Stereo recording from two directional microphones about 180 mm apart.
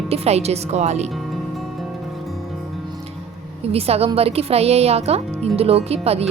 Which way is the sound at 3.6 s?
35° right (ahead or behind).